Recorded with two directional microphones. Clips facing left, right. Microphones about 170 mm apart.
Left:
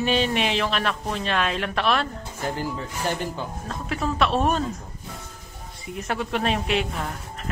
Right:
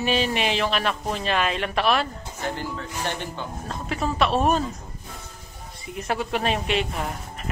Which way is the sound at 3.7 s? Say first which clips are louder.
Even; centre (ahead or behind).